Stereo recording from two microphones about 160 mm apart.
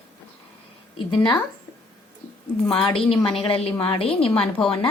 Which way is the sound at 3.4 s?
35° left (ahead or behind).